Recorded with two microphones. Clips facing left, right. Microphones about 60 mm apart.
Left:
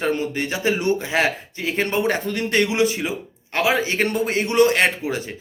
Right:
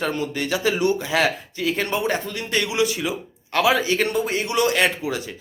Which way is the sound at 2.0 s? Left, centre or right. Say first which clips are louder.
Left 3 dB; left.